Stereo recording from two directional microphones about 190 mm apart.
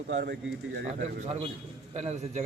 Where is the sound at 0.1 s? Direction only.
55° right (ahead or behind).